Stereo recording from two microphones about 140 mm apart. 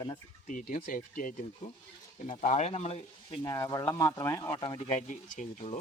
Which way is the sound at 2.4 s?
55° left (ahead or behind).